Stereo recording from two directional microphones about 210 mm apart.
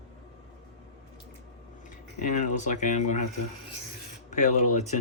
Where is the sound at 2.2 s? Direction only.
35° left (ahead or behind).